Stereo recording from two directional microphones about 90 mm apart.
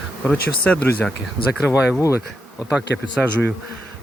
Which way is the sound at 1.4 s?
75° left (ahead or behind).